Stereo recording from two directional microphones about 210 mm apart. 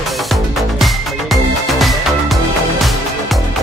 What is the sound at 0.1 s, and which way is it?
Music, centre (ahead or behind).